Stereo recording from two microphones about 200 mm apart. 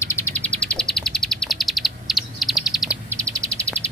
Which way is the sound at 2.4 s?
Centre (ahead or behind).